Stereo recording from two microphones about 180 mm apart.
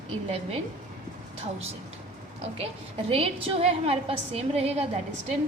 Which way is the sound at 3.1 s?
30° right (ahead or behind).